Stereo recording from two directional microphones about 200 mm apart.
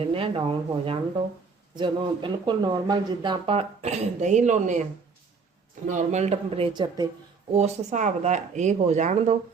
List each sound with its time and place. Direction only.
0.0 s speech: 30° right (ahead or behind)
5.9 s speech: 35° right (ahead or behind); by 7.1 s 20° right (ahead or behind)
7.5 s speech: 35° right (ahead or behind)